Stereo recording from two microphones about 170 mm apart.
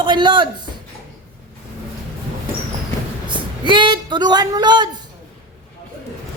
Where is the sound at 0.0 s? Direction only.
25° right (ahead or behind).